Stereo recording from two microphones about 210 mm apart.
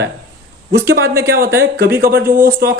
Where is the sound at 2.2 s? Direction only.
10° right (ahead or behind).